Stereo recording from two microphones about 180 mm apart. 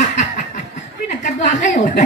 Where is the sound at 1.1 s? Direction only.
40° left (ahead or behind).